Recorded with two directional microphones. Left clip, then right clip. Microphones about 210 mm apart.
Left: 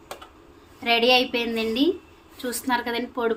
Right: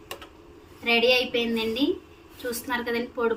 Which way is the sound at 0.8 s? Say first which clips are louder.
Left 2 dB; 55° left (ahead or behind).